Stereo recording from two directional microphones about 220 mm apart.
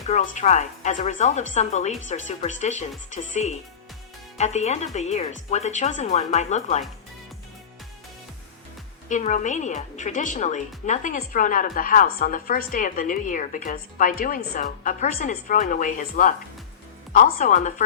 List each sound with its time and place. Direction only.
0.1 s a woman's voice: 35° left (ahead or behind)
9.0 s a woman's voice: 35° left (ahead or behind)
17.3 s a woman's voice: 35° left (ahead or behind)